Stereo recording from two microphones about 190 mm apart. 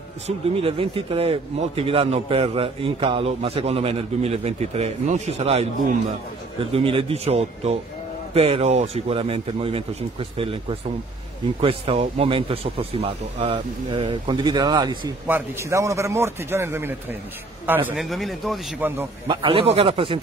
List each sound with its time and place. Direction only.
0.6 s a man's voice: 30° right (ahead or behind)